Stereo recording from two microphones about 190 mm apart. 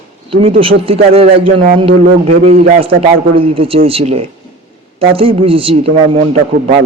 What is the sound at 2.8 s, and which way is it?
A woman's voice, 30° right (ahead or behind).